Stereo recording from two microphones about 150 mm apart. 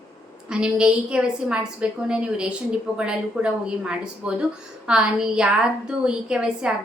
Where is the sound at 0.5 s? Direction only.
5° right (ahead or behind).